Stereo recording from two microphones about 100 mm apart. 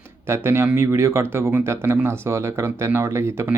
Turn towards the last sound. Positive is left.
turn(degrees=-25)  # may be behind; listen again after turning